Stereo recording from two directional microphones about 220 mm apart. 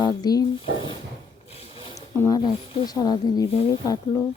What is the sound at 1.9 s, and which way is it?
Speech, 15° left (ahead or behind).